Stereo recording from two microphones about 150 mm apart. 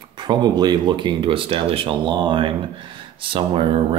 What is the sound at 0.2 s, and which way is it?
Speech, 30° right (ahead or behind).